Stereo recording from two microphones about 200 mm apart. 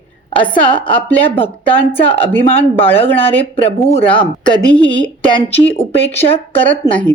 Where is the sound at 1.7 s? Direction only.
10° left (ahead or behind).